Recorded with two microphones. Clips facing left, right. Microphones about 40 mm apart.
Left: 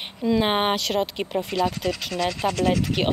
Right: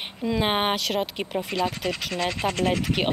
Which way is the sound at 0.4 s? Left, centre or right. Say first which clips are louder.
Even; centre.